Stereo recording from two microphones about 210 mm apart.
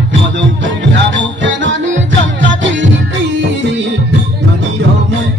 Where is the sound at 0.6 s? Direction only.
60° right (ahead or behind).